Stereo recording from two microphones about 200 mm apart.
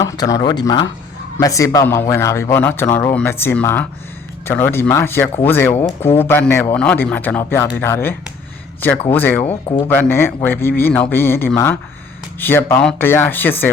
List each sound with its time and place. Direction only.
0.0 s speech: 20° left (ahead or behind)
9.4 s speech: 30° left (ahead or behind)
9.9 s speech: 10° left (ahead or behind)